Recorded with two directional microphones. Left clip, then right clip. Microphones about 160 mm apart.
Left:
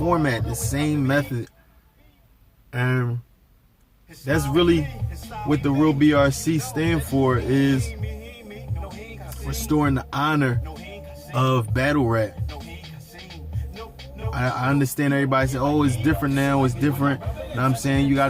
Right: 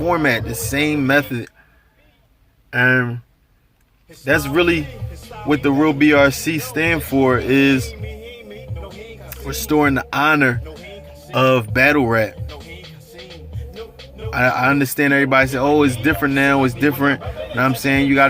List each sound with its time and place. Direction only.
0.1 s speech: 20° right (ahead or behind)
2.7 s speech: 20° right (ahead or behind)
4.3 s speech: 20° right (ahead or behind)
9.5 s speech: 25° right (ahead or behind)
14.3 s speech: 25° right (ahead or behind)